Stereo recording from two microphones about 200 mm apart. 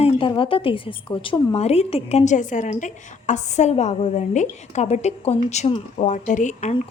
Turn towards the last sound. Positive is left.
turn(degrees=35)  # may be behind; listen again after turning